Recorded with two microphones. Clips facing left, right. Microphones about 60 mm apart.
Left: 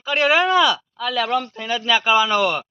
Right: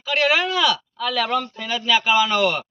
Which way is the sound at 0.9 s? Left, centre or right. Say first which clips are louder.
Left 1 dB; centre.